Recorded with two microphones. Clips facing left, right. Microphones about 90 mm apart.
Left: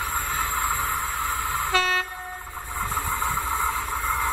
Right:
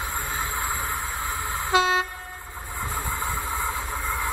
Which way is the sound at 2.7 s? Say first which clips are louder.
Left 3 dB; 20° left (ahead or behind).